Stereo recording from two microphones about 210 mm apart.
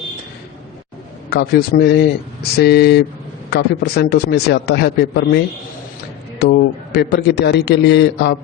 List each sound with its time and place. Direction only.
1.3 s a man's voice: 50° left (ahead or behind)
6.4 s a man's voice: 50° left (ahead or behind)